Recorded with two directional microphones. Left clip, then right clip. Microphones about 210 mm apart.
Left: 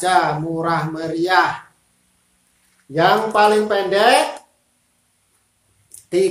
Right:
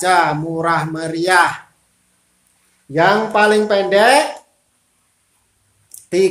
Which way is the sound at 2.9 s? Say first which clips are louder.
Right 1 dB; 30° right (ahead or behind).